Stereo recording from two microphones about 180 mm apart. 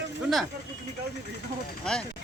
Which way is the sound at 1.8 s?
5° left (ahead or behind).